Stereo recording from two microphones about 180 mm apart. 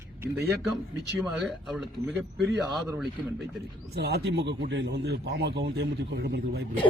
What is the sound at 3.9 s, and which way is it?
Speech, 65° right (ahead or behind).